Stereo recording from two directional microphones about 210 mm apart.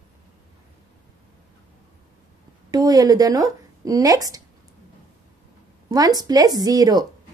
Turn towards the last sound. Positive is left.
turn(degrees=-20)  # may be behind; listen again after turning